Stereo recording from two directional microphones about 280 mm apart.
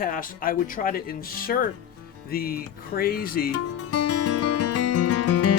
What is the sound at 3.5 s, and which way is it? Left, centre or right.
Music, left.